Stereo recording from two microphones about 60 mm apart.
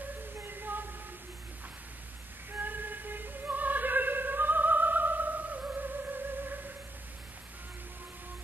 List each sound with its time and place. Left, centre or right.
0.4 s music: right
2.5 s opera: right